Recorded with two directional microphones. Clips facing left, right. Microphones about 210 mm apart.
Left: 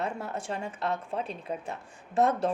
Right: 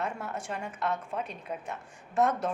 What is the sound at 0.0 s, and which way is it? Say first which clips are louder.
A woman's voice: left 2 dB; 35° left (ahead or behind).